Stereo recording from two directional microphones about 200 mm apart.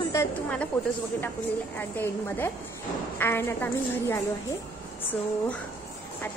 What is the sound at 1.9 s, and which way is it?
Speech, 10° left (ahead or behind).